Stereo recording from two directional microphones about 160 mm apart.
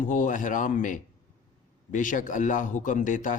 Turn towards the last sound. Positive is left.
turn(degrees=55)  # may be behind; listen again after turning